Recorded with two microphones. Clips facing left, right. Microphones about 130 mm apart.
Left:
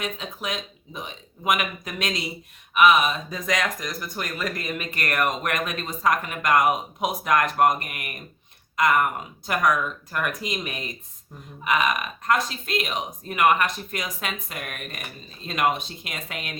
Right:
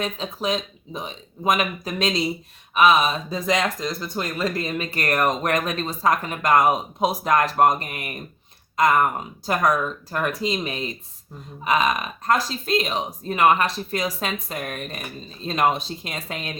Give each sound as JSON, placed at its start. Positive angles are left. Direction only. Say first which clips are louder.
{"t": 0.0, "sound": "speech", "louder": "right 5 dB", "side_deg": -30}